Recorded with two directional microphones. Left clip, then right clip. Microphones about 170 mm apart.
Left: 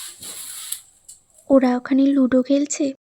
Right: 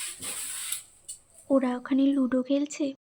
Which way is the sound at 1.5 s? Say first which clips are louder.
Left 9 dB; 40° left (ahead or behind).